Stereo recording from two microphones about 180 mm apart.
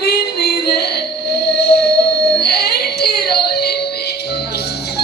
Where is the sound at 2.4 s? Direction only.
65° left (ahead or behind).